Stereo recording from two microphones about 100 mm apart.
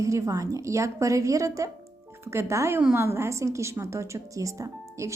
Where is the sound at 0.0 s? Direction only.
30° right (ahead or behind).